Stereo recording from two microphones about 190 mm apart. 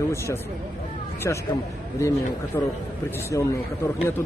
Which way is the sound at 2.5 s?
10° left (ahead or behind).